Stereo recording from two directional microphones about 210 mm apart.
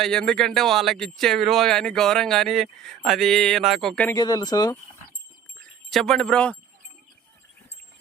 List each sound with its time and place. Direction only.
0.0 s speech: centre (ahead or behind)
4.1 s speech: 15° left (ahead or behind)
5.5 s speech: centre (ahead or behind)